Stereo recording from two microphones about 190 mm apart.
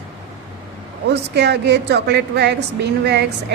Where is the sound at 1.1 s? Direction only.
60° right (ahead or behind).